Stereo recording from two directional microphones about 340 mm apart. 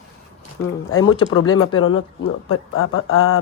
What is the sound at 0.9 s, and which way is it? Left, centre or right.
Speech, left.